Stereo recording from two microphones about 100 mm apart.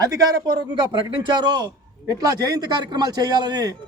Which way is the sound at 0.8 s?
50° right (ahead or behind).